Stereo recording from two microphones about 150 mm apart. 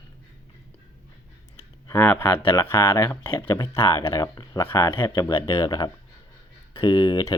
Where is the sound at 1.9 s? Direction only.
15° left (ahead or behind).